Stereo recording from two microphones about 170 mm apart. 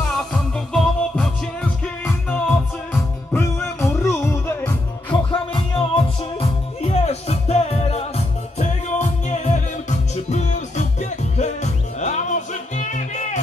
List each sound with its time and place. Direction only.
0.0 s music: 5° left (ahead or behind)
5.1 s music: 30° left (ahead or behind)